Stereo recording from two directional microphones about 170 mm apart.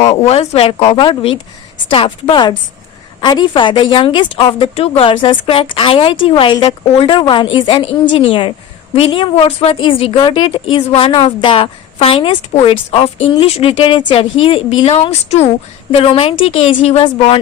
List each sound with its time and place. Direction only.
0.0 s a woman's voice: 40° left (ahead or behind)